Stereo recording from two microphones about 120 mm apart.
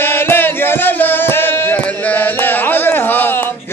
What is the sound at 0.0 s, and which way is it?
Chant, 20° left (ahead or behind).